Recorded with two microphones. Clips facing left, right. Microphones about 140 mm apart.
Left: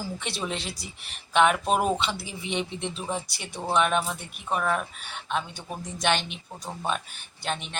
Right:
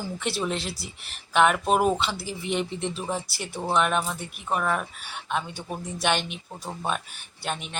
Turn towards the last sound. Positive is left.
turn(degrees=-5)  # may be behind; listen again after turning